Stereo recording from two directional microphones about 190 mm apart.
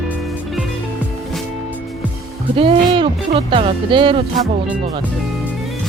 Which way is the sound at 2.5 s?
30° right (ahead or behind).